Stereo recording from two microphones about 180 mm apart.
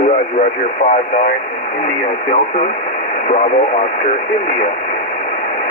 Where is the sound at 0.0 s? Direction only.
45° left (ahead or behind).